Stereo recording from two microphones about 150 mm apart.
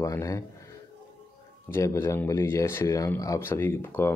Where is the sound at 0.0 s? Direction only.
20° left (ahead or behind).